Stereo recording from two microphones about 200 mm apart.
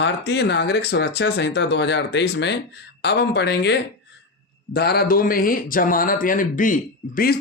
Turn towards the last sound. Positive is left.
turn(degrees=45)  # may be behind; listen again after turning